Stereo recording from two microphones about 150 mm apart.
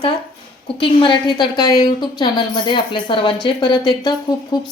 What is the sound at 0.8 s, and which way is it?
A woman's voice, 30° left (ahead or behind).